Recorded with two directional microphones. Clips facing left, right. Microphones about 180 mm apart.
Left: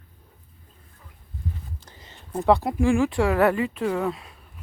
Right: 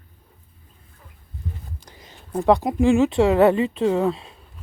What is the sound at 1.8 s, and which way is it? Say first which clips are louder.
Speech: right 2 dB; 15° right (ahead or behind).